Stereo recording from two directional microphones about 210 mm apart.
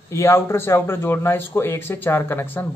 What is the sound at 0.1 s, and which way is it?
A man's voice, 15° left (ahead or behind).